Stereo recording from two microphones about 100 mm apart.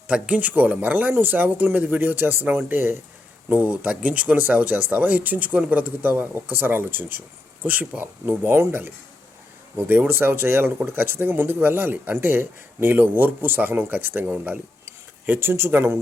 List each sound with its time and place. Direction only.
0.1 s speech: 15° right (ahead or behind)